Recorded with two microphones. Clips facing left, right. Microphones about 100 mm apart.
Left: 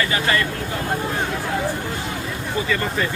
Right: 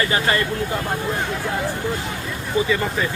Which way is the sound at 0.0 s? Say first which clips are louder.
Right 1 dB; 30° right (ahead or behind).